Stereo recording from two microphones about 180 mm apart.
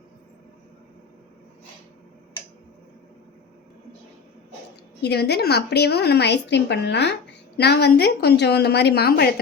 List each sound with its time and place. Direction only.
5.0 s a woman's voice: 65° left (ahead or behind)